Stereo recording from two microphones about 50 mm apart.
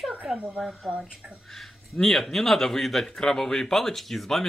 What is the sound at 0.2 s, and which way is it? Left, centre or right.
Speech, centre.